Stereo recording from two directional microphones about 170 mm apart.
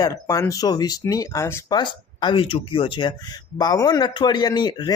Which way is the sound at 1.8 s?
30° left (ahead or behind).